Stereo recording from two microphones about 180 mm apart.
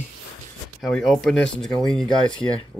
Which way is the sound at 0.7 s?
Centre (ahead or behind).